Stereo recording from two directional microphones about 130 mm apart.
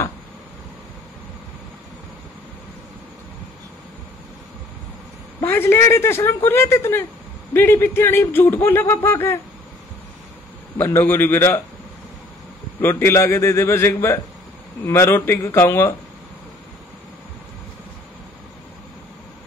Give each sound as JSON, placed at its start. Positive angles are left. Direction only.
{"t": 5.4, "sound": "speech", "side_deg": 15}
{"t": 10.8, "sound": "speech", "side_deg": 20}
{"t": 12.8, "sound": "speech", "side_deg": 20}